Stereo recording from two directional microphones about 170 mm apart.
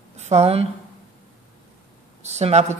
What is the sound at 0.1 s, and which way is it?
Speech, 40° right (ahead or behind).